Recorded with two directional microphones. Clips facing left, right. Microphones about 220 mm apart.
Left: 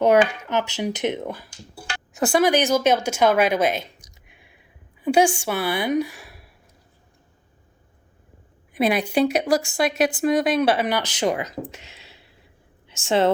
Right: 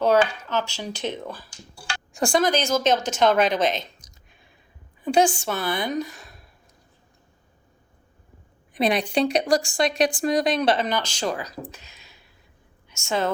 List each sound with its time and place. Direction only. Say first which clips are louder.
0.0 s speech: left 3 dB; 20° left (ahead or behind)
2.1 s speech: left 3 dB; 5° left (ahead or behind)
4.1 s a sound: left 2 dB; 15° left (ahead or behind)
5.0 s a woman's voice: left 2 dB; 10° left (ahead or behind)
8.7 s a woman's voice: left 2 dB; 5° left (ahead or behind); by 13.3 s 30° left (ahead or behind)